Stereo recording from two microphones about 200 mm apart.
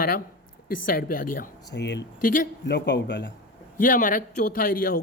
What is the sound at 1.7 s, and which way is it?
Speech, 60° left (ahead or behind).